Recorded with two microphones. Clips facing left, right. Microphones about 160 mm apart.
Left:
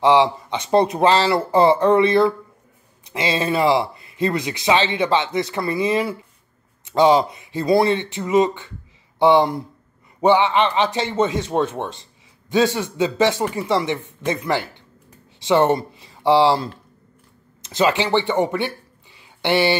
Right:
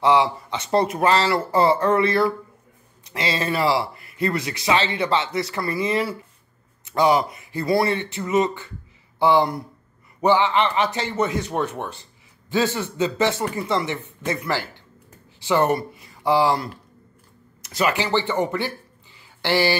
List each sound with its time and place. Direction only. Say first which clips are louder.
0.0 s speech: left 3 dB; 20° left (ahead or behind)
17.6 s speech: left 4 dB; 20° left (ahead or behind)
19.1 s a sound: left 2 dB; 20° left (ahead or behind)